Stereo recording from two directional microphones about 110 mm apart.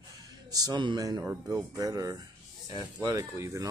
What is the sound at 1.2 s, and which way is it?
Speech, 20° right (ahead or behind).